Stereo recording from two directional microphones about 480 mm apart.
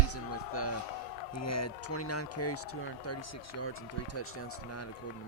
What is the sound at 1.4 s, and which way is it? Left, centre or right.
Speech, left.